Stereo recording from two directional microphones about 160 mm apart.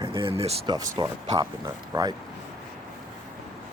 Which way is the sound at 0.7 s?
25° right (ahead or behind).